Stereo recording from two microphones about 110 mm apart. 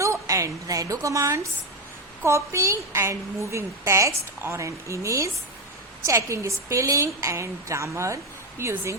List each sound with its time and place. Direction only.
0.0 s a woman's voice: 30° right (ahead or behind)